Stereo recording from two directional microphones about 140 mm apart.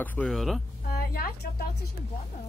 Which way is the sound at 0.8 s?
90° left.